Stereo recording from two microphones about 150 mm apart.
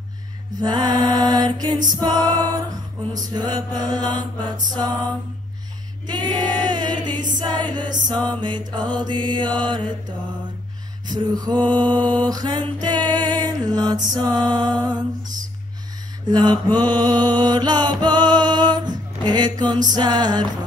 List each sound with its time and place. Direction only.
0.6 s music: 30° right (ahead or behind)
6.0 s music: 30° right (ahead or behind)
8.3 s mantra: 30° right (ahead or behind)
11.1 s music: 30° right (ahead or behind)
16.3 s music: 25° right (ahead or behind)